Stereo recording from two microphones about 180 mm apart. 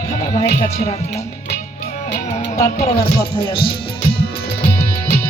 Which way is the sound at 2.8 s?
30° left (ahead or behind).